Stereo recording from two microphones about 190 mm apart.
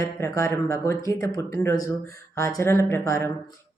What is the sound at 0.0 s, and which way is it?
Speech, 15° left (ahead or behind).